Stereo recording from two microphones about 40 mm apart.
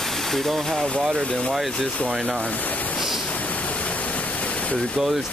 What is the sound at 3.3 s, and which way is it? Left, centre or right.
Waterfall, left.